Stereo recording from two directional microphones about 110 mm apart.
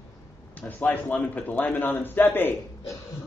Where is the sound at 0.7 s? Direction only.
15° left (ahead or behind).